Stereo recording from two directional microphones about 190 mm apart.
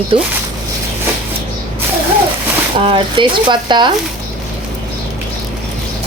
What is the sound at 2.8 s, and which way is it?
Speech, 25° right (ahead or behind).